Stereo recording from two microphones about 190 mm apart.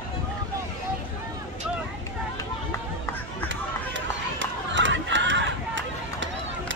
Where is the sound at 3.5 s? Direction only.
75° right (ahead or behind).